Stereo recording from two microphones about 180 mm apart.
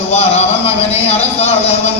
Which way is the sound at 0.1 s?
35° left (ahead or behind).